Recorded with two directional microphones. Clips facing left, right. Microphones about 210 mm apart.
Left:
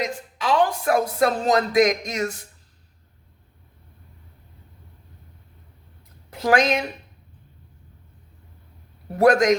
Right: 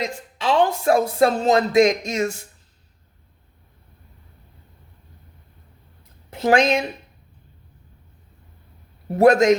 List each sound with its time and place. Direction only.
0.0 s a woman's voice: 25° right (ahead or behind)
6.3 s a woman's voice: 25° right (ahead or behind)
9.1 s a woman's voice: 25° right (ahead or behind)